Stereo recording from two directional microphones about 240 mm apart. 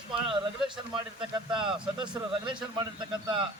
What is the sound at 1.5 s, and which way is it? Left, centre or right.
Speech, centre.